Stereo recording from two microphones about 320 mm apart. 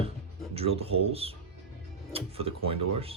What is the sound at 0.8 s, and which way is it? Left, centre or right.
Speech, centre.